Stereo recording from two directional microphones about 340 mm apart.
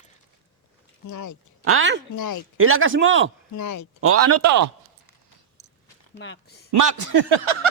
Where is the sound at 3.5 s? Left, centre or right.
Left.